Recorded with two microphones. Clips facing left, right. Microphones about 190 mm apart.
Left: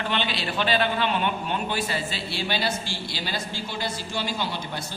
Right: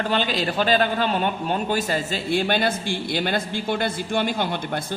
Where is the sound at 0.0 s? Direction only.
40° right (ahead or behind).